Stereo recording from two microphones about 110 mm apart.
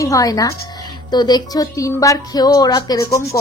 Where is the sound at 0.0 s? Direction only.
30° left (ahead or behind).